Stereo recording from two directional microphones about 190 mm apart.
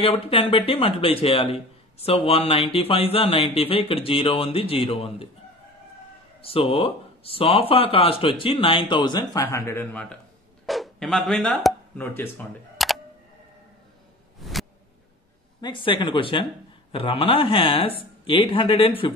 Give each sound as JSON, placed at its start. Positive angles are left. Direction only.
{"t": 0.0, "sound": "speech", "side_deg": 30}
{"t": 6.4, "sound": "speech", "side_deg": 30}
{"t": 12.7, "sound": "camera", "side_deg": 0}
{"t": 14.4, "sound": "a sound", "side_deg": 0}
{"t": 15.6, "sound": "speech", "side_deg": 25}